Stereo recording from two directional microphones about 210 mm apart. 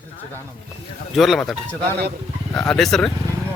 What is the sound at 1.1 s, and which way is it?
Speech, centre (ahead or behind).